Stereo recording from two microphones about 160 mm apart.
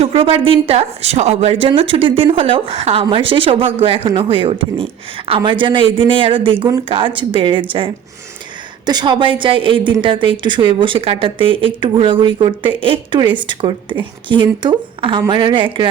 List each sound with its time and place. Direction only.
0.0 s a woman's voice: 35° right (ahead or behind)
8.9 s a woman's voice: 30° right (ahead or behind)